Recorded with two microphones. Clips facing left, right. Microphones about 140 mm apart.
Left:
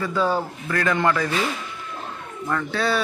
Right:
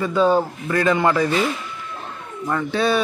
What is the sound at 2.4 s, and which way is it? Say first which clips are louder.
Speech: right 3 dB; 20° right (ahead or behind).